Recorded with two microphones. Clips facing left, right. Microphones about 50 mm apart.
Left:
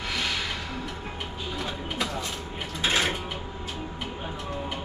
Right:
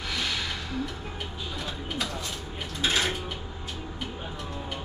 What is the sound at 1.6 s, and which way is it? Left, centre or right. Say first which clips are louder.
Mechanisms: left 2 dB; centre.